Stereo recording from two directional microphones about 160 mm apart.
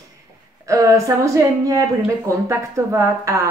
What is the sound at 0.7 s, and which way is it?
Speech, 20° right (ahead or behind).